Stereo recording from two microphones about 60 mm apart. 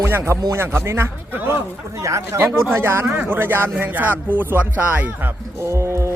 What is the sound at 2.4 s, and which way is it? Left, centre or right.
Speech, right.